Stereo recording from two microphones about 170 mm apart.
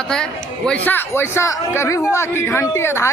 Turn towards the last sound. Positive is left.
turn(degrees=15)  # may be behind; listen again after turning